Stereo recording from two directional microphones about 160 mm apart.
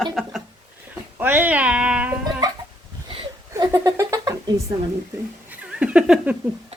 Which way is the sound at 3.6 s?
20° right (ahead or behind).